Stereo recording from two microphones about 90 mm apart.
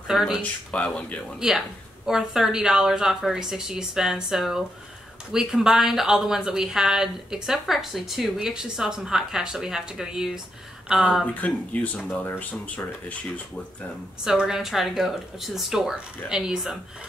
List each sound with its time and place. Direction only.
0.1 s speech: 5° right (ahead or behind)
0.4 s speech: 15° left (ahead or behind)
2.0 s speech: 5° right (ahead or behind)
11.4 s speech: 15° left (ahead or behind)
14.2 s speech: 10° right (ahead or behind)